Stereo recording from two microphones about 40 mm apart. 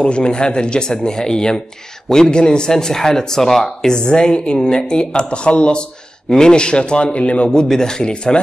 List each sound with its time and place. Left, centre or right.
0.0 s a woman's voice: left; by 3.9 s centre
3.9 s a woman's voice: centre
7.4 s a man's voice: centre